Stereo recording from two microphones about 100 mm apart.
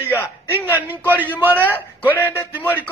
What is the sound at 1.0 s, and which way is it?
Speech, 20° right (ahead or behind).